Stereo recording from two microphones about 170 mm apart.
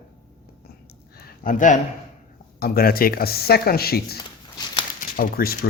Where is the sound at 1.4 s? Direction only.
50° left (ahead or behind).